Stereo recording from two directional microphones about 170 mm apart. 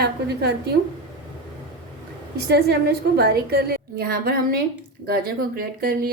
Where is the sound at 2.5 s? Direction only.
70° right (ahead or behind).